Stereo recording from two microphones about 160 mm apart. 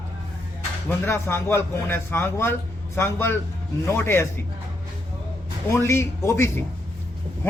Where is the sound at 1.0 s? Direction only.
15° left (ahead or behind).